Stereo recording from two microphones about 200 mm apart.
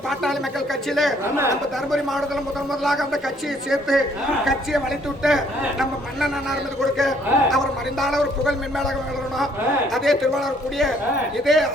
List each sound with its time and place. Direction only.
0.1 s a sound: centre (ahead or behind)
0.9 s a man's voice: centre (ahead or behind)
5.2 s a man's voice: centre (ahead or behind)
9.9 s a man's voice: centre (ahead or behind)